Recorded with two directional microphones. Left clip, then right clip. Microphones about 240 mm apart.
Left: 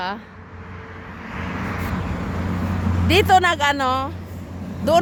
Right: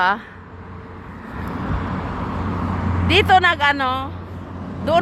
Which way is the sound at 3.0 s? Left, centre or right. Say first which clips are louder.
Right 1 dB; left.